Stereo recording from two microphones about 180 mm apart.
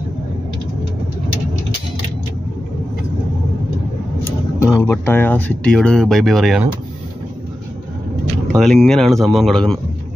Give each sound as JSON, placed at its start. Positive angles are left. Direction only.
{"t": 4.2, "sound": "speech", "side_deg": 15}
{"t": 8.5, "sound": "speech", "side_deg": 0}